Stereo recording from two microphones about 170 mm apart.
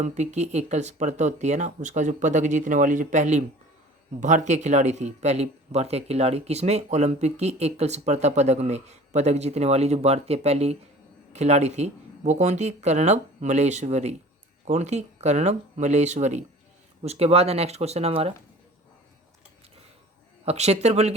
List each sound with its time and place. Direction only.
0.0 s speech: 45° right (ahead or behind)
20.4 s speech: 40° right (ahead or behind)